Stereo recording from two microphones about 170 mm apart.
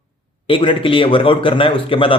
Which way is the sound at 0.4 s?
30° left (ahead or behind).